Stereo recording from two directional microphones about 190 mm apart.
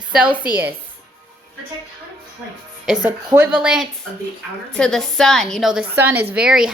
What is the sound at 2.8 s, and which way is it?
Speech, 5° right (ahead or behind).